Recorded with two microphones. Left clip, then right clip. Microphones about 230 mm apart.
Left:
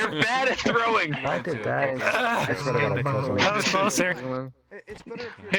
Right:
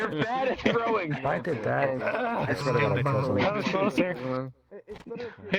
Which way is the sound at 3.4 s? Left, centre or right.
Left.